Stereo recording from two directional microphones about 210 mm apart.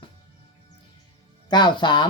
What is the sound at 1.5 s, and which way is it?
Speech, 20° left (ahead or behind).